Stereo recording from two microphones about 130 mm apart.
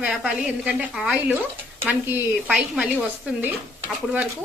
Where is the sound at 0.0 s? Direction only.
5° right (ahead or behind).